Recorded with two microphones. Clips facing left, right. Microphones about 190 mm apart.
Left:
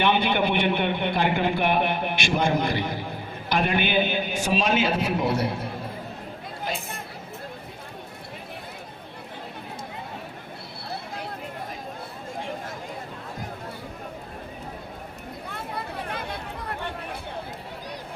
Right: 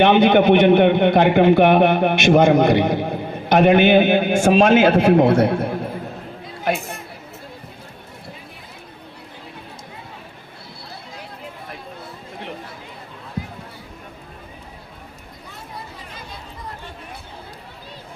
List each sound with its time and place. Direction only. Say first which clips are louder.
0.0 s a man's voice: right 9 dB; 60° right (ahead or behind)
15.4 s chatter: left 3 dB; 60° left (ahead or behind)